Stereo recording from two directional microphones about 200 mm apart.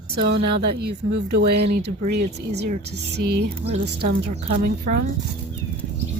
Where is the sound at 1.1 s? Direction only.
55° right (ahead or behind).